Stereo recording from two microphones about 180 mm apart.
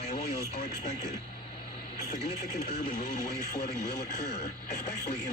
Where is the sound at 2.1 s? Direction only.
35° left (ahead or behind).